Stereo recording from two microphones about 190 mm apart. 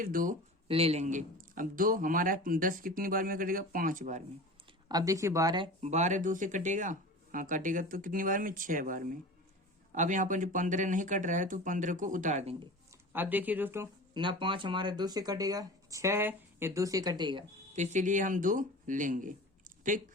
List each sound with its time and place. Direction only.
0.0 s speech: 50° right (ahead or behind)
0.7 s speech: 30° right (ahead or behind)
4.9 s speech: 20° right (ahead or behind)
5.8 s speech: 40° right (ahead or behind)
13.1 s speech: 10° right (ahead or behind)
14.1 s speech: 25° right (ahead or behind)
17.7 s speech: 40° right (ahead or behind)